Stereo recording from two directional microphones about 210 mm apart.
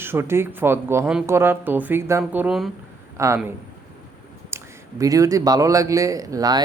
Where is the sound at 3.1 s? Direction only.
15° right (ahead or behind).